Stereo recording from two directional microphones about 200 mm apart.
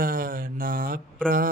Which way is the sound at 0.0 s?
45° right (ahead or behind).